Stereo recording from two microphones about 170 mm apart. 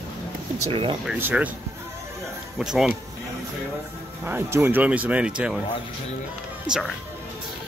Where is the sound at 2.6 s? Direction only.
5° right (ahead or behind).